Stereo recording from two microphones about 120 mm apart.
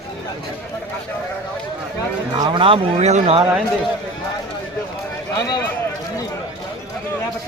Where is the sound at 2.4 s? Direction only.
40° right (ahead or behind).